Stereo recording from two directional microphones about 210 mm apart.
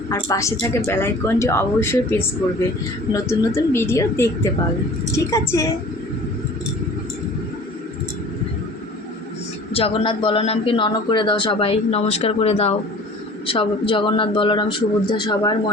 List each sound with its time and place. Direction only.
0.1 s speech: 15° left (ahead or behind)
9.7 s speech: 25° left (ahead or behind)